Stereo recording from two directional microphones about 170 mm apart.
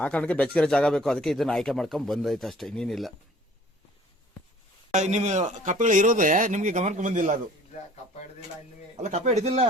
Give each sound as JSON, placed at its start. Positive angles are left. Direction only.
{"t": 0.0, "sound": "speech", "side_deg": 5}
{"t": 4.9, "sound": "speech", "side_deg": -45}
{"t": 9.0, "sound": "speech", "side_deg": -45}